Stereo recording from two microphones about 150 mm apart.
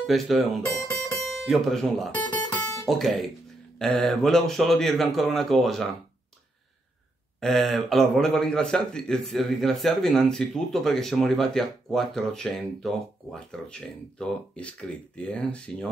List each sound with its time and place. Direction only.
0.0 s speech: centre (ahead or behind)
2.6 s music: 15° left (ahead or behind)
2.9 s speech: centre (ahead or behind)
7.3 s speech: centre (ahead or behind)